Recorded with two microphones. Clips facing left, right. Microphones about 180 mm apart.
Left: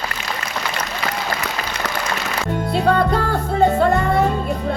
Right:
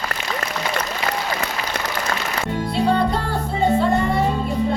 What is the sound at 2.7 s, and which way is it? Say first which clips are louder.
Music: left 2 dB; 45° left (ahead or behind).